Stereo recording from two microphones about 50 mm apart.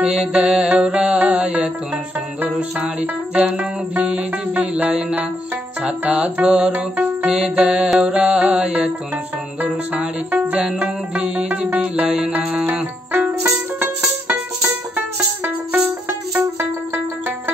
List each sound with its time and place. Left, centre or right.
0.0 s music: centre
2.8 s music: right
9.6 s music: right
10.6 s music: centre
13.1 s music: right